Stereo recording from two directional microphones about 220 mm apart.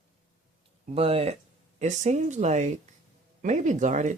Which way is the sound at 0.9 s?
25° right (ahead or behind).